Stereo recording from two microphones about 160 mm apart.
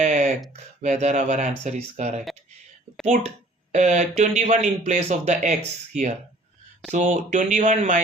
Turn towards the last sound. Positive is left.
turn(degrees=-50)  # may be behind; listen again after turning